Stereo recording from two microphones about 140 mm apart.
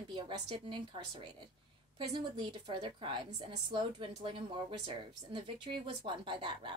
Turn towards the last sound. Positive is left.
turn(degrees=-35)  # may be behind; listen again after turning